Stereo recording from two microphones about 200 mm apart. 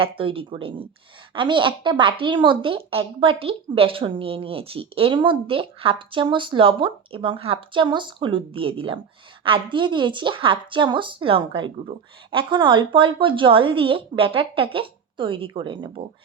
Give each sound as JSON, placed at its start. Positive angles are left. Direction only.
{"t": 0.0, "sound": "a woman's voice", "side_deg": -25}